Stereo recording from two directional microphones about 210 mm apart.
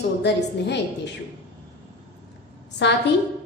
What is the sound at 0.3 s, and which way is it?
Speech, 55° left (ahead or behind).